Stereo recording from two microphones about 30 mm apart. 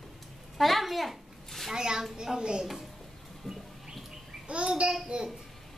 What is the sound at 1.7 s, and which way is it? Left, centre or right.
Speech, right.